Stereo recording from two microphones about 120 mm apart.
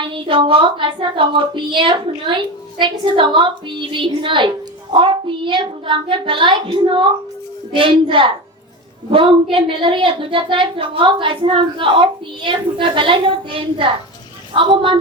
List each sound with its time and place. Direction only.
0.0 s a woman's voice: 45° right (ahead or behind)